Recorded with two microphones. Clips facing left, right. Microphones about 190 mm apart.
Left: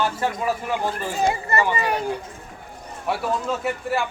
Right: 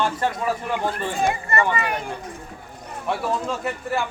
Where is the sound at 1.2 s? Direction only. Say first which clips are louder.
Left 1 dB; 25° left (ahead or behind).